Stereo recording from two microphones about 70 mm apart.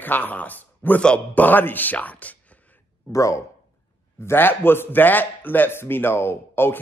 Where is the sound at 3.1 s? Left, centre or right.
Left.